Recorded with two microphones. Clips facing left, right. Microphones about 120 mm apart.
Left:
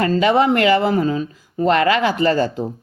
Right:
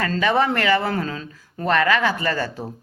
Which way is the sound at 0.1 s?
20° left (ahead or behind).